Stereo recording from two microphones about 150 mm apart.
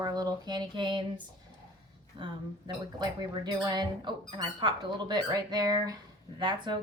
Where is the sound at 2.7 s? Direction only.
30° right (ahead or behind).